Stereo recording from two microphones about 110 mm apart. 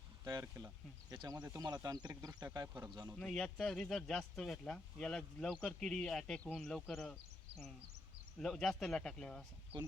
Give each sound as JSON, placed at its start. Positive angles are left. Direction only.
{"t": 0.3, "sound": "speech", "side_deg": -30}
{"t": 3.2, "sound": "speech", "side_deg": 5}